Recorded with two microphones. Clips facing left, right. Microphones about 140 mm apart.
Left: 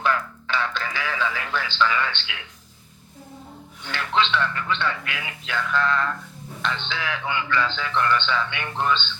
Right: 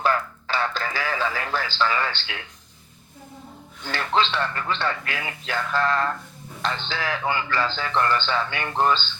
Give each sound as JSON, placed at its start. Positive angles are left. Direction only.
{"t": 0.0, "sound": "radio", "side_deg": -40}
{"t": 3.8, "sound": "a man's voice", "side_deg": -40}